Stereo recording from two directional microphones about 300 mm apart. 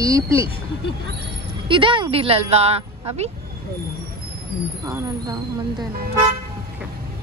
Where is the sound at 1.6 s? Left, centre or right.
Centre.